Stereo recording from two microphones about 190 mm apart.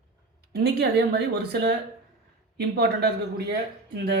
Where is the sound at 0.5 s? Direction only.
60° right (ahead or behind).